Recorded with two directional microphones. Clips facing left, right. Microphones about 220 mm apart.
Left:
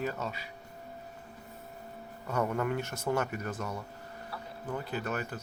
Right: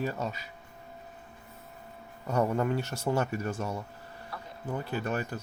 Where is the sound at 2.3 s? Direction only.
30° right (ahead or behind).